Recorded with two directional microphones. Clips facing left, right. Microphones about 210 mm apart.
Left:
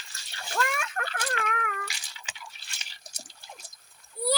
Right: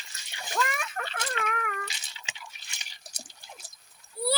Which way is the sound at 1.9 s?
25° right (ahead or behind).